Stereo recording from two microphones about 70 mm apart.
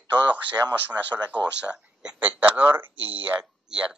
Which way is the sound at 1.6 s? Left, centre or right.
Centre.